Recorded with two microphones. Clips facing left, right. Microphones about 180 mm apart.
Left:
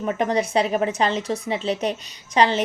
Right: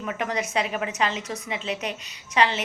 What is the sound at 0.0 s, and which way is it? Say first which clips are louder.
A woman's voice: left 6 dB; 35° left (ahead or behind).